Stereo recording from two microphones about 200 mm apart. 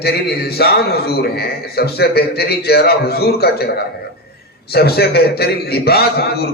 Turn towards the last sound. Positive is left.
turn(degrees=50)  # may be behind; listen again after turning